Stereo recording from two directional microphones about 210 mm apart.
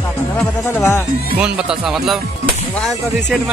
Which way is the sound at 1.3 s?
5° right (ahead or behind).